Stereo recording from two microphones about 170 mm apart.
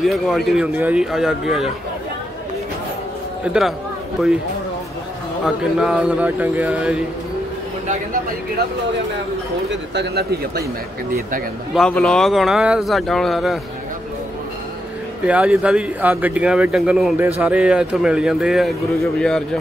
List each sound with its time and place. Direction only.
0.0 s speech: centre (ahead or behind)
5.4 s speech: 5° right (ahead or behind)
9.9 s speech: 70° right (ahead or behind)
11.7 s speech: 5° left (ahead or behind)
15.2 s speech: 5° right (ahead or behind)